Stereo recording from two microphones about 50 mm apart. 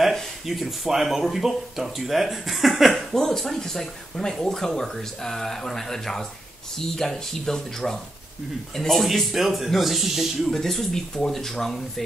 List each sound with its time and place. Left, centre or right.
0.0 s speech: centre